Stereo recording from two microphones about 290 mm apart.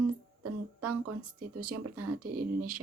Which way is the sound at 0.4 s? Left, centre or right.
Right.